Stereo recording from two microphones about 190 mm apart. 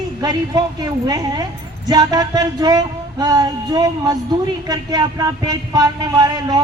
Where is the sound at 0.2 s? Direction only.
20° right (ahead or behind).